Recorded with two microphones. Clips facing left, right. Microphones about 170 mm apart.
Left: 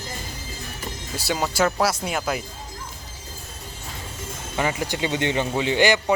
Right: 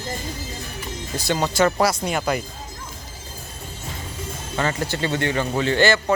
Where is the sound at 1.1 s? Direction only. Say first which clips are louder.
Right 3 dB; 5° left (ahead or behind).